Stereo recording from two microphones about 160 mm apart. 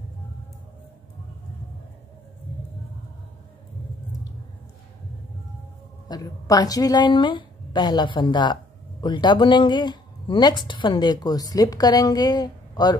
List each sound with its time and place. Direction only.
6.0 s speech: 25° left (ahead or behind)